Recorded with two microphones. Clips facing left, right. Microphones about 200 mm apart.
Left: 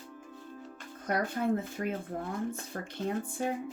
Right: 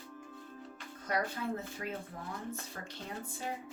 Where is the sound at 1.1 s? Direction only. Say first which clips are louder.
Left 6 dB; 55° left (ahead or behind).